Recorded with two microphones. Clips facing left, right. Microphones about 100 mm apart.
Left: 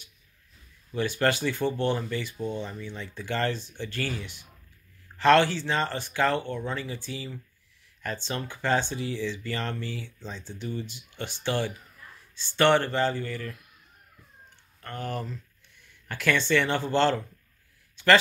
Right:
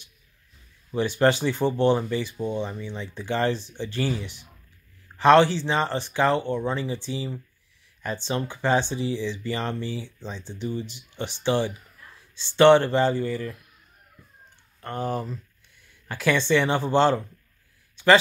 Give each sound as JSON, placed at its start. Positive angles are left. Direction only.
{"t": 0.9, "sound": "speech", "side_deg": -20}
{"t": 14.8, "sound": "speech", "side_deg": -20}
{"t": 17.9, "sound": "a sound", "side_deg": -15}